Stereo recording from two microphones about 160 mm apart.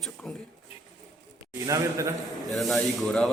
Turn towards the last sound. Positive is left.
turn(degrees=0)  # may be behind; listen again after turning